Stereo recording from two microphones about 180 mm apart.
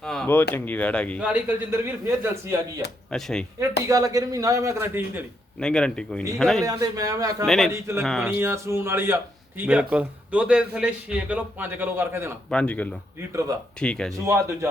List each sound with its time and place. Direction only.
0.0 s a sound: 5° left (ahead or behind)
0.5 s speech: 10° left (ahead or behind)
1.2 s a man's voice: 10° right (ahead or behind)
3.1 s speech: 5° left (ahead or behind)
3.8 s a man's voice: 20° right (ahead or behind)
5.5 s speech: 5° left (ahead or behind)
6.7 s a man's voice: 20° right (ahead or behind)
7.4 s speech: centre (ahead or behind)
7.7 s a man's voice: 15° right (ahead or behind)
12.5 s speech: 5° left (ahead or behind)
14.3 s a man's voice: 15° right (ahead or behind)